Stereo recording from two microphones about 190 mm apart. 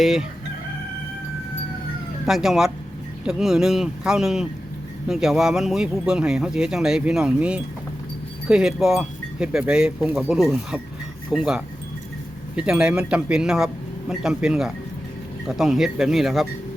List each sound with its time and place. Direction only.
0.0 s speech: centre (ahead or behind)
2.2 s speech: centre (ahead or behind)